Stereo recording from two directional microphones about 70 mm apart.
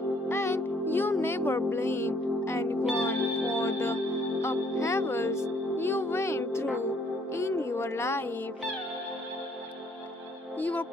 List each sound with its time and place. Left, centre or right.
0.3 s music: left
10.6 s music: left